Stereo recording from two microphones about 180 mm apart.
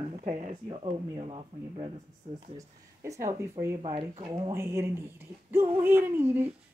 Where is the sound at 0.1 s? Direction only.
40° right (ahead or behind).